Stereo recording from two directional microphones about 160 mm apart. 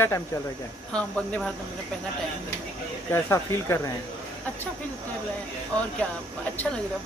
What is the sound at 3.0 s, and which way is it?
Speech, 15° left (ahead or behind).